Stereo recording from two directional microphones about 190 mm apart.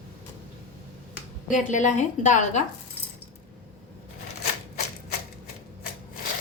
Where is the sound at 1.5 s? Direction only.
40° left (ahead or behind).